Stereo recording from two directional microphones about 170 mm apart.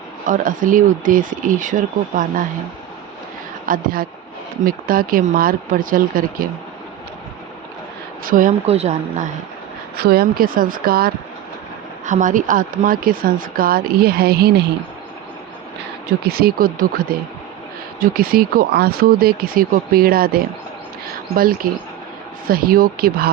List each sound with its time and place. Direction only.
0.3 s speech: 50° right (ahead or behind)
3.7 s speech: 55° right (ahead or behind)
8.2 s speech: 55° right (ahead or behind)
8.6 s speech: 40° right (ahead or behind)
10.0 s speech: 65° right (ahead or behind)
12.0 s speech: 50° right (ahead or behind); by 14.5 s 65° right (ahead or behind)
16.2 s speech: 65° right (ahead or behind)